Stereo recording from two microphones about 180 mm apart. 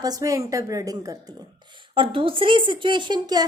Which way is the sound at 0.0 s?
20° right (ahead or behind).